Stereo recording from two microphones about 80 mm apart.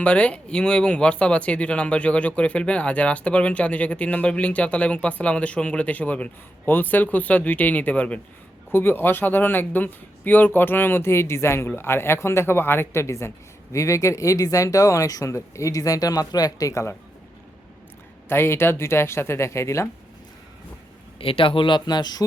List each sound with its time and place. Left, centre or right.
0.0 s speech: centre; by 16.9 s left
18.3 s speech: left
21.4 s speech: left